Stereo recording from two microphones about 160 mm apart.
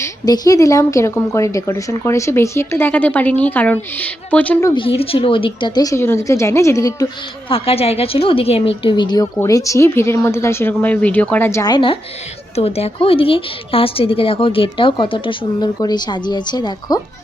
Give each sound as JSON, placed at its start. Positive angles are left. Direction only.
{"t": 0.0, "sound": "a woman's voice", "side_deg": 25}
{"t": 4.7, "sound": "a woman's voice", "side_deg": 35}
{"t": 7.5, "sound": "a woman's voice", "side_deg": 35}
{"t": 11.7, "sound": "a woman's voice", "side_deg": 30}